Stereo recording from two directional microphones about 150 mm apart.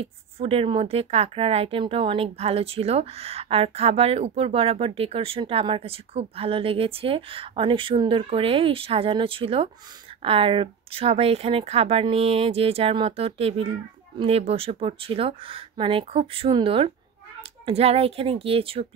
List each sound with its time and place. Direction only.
0.0 s a woman's voice: 40° right (ahead or behind)